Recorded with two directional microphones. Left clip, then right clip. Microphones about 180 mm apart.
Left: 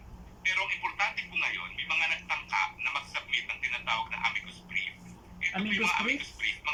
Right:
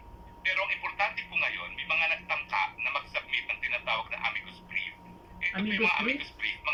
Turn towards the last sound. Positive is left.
turn(degrees=-25)  # may be behind; listen again after turning